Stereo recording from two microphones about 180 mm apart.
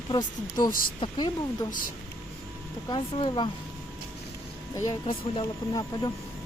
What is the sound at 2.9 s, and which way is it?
Speech, 25° left (ahead or behind).